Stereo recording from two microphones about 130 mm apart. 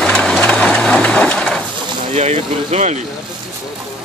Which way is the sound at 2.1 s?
60° right (ahead or behind).